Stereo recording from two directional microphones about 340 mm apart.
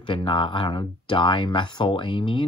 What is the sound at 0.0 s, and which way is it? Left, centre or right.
Speech, centre.